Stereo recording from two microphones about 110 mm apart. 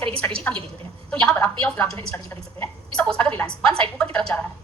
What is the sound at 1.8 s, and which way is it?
Speech, 30° left (ahead or behind).